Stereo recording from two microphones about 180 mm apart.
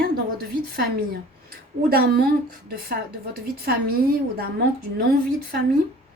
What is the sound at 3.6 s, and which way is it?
Speech, 60° right (ahead or behind).